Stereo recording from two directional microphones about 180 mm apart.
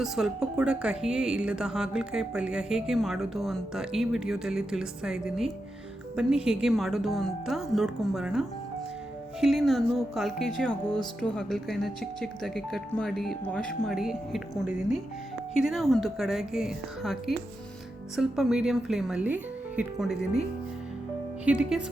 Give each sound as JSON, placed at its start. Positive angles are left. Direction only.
{"t": 0.0, "sound": "speech", "side_deg": -5}
{"t": 21.4, "sound": "speech", "side_deg": -5}